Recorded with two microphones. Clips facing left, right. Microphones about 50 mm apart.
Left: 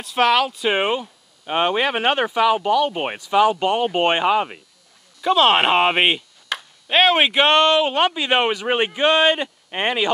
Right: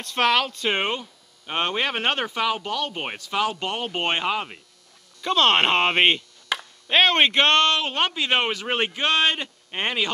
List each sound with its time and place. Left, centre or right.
0.0 s speech: centre